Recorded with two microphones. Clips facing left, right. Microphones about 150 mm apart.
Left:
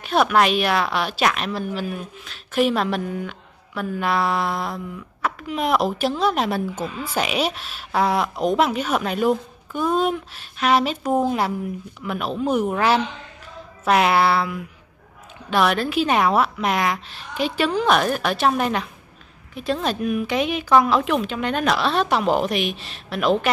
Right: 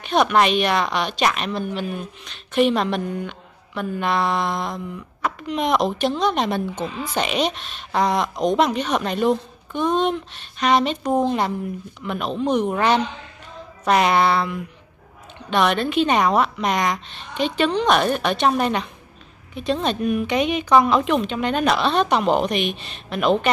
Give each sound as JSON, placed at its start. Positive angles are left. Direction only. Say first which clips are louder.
{"t": 0.0, "sound": "a woman's voice", "louder": "even", "side_deg": 5}